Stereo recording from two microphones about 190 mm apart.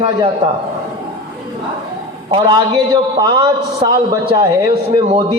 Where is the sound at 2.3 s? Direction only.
20° right (ahead or behind).